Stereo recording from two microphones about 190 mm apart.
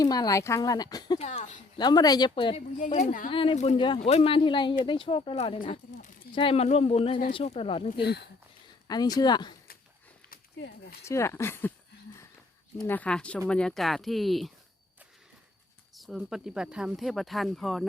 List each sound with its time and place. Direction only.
0.0 s speech: 20° left (ahead or behind)
1.2 s speech: 35° left (ahead or behind)
1.8 s speech: 20° left (ahead or behind)
2.7 s a woman's voice: 40° left (ahead or behind)
3.2 s speech: 30° left (ahead or behind)
11.0 s speech: 15° left (ahead or behind)
12.8 s speech: 10° left (ahead or behind)
16.0 s speech: centre (ahead or behind)